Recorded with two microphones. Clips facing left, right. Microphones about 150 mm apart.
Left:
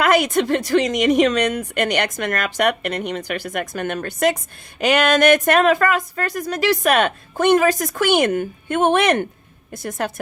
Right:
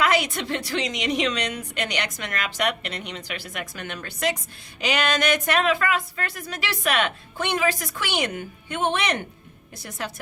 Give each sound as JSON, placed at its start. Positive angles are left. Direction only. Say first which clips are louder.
{"t": 0.0, "sound": "speech", "louder": "left 6 dB", "side_deg": 50}